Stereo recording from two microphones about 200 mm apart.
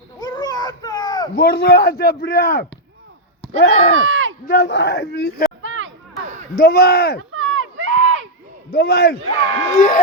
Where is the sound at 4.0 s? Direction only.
75° right (ahead or behind).